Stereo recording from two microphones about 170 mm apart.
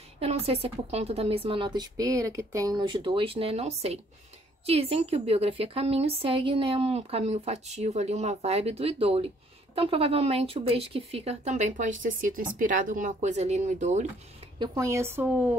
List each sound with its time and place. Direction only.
0.2 s a woman's voice: 35° right (ahead or behind)
14.6 s speech: 25° right (ahead or behind)